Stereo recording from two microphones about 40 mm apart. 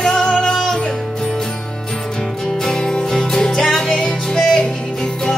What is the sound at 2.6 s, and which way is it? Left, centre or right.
Music, centre.